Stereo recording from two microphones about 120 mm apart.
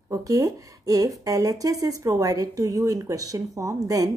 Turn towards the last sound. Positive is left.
turn(degrees=-30)  # may be behind; listen again after turning